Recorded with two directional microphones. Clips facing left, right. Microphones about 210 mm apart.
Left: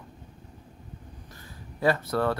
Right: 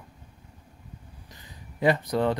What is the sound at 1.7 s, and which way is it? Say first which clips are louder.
Speech: right 1 dB; 15° right (ahead or behind).